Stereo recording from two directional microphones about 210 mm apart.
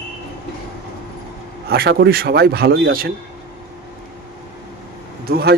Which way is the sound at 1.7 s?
50° right (ahead or behind).